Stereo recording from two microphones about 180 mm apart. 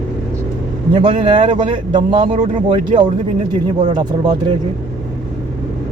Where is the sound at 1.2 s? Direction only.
30° right (ahead or behind).